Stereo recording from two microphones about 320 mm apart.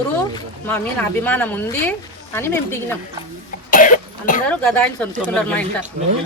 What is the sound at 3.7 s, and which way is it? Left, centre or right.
Cough, left.